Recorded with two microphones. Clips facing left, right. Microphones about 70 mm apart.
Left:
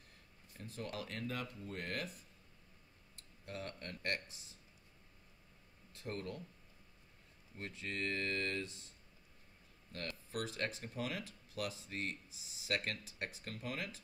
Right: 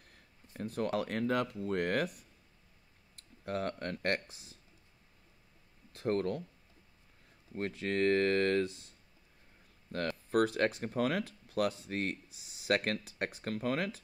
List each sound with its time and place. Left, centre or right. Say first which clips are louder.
0.0 s speech: right 3 dB; right
3.4 s speech: right 11 dB; right
5.9 s speech: right 12 dB; right
7.5 s speech: right 11 dB; right
9.9 s speech: right 13 dB; right